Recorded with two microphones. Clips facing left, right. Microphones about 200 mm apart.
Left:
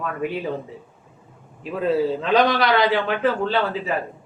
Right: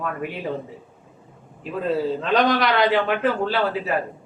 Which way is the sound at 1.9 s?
Centre (ahead or behind).